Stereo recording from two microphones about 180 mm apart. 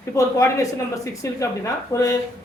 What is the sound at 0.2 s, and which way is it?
A woman's voice, 15° left (ahead or behind).